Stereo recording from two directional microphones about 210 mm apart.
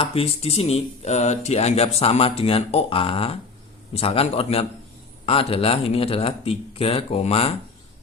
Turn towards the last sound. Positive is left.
turn(degrees=30)  # may be behind; listen again after turning